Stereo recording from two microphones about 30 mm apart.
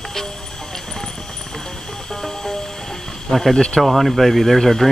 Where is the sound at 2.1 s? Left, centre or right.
Centre.